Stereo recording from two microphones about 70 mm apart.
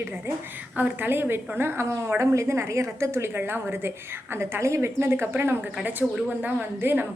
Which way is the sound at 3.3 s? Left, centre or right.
Right.